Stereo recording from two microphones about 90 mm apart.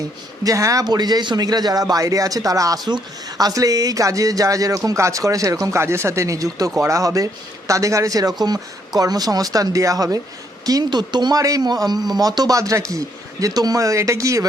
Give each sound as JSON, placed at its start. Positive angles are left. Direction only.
{"t": 0.4, "sound": "a man's voice", "side_deg": -40}
{"t": 10.8, "sound": "speech", "side_deg": -55}